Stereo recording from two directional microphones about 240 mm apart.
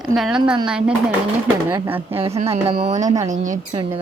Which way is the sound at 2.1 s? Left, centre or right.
Right.